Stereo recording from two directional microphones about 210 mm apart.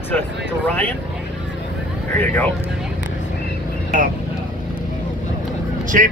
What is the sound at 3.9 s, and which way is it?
Speech, 40° right (ahead or behind).